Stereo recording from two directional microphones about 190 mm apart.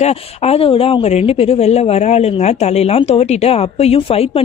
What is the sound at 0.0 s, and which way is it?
Speech, 30° left (ahead or behind).